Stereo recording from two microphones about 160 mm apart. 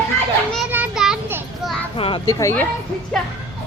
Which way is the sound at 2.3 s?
20° left (ahead or behind).